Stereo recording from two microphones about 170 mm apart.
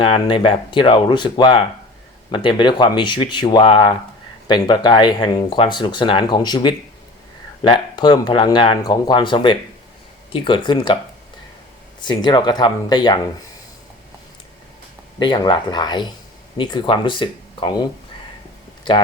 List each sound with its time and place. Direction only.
0.0 s speech: 30° left (ahead or behind)
11.9 s speech: 25° left (ahead or behind)
15.2 s speech: 25° left (ahead or behind)